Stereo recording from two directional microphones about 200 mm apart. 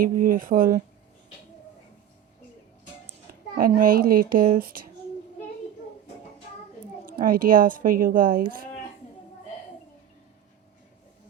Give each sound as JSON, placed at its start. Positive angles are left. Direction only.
{"t": 0.0, "sound": "a woman's voice", "side_deg": -45}
{"t": 3.6, "sound": "a woman's voice", "side_deg": -45}
{"t": 7.1, "sound": "a woman's voice", "side_deg": -45}